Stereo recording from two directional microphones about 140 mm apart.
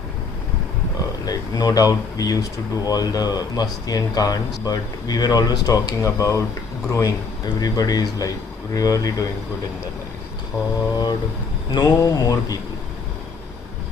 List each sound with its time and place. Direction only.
1.2 s speech: 25° left (ahead or behind)
10.9 s speech: 30° left (ahead or behind)